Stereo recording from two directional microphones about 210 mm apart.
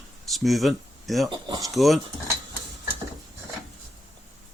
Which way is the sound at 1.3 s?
20° right (ahead or behind).